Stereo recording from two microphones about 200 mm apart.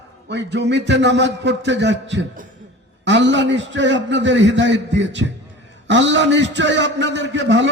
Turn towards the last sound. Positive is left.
turn(degrees=-65)  # may be behind; listen again after turning